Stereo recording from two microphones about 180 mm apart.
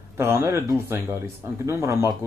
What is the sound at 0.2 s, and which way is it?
Speech, 15° right (ahead or behind).